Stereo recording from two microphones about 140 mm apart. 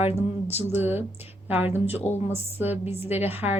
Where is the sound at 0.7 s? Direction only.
15° right (ahead or behind).